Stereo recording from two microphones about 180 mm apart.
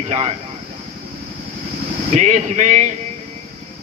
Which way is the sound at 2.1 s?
40° right (ahead or behind).